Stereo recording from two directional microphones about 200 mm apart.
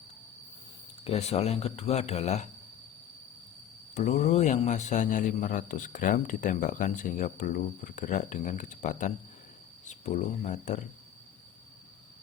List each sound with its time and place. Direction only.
1.0 s speech: 30° left (ahead or behind)
3.9 s speech: 35° left (ahead or behind)